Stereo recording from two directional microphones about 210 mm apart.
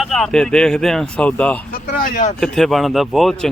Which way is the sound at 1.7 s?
45° left (ahead or behind).